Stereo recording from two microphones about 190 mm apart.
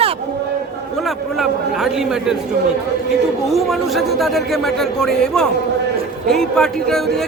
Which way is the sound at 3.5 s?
Centre (ahead or behind).